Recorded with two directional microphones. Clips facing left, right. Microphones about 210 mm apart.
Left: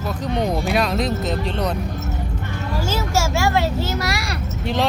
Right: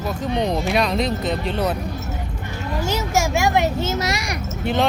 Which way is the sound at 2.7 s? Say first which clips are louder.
Right 1 dB; 15° right (ahead or behind).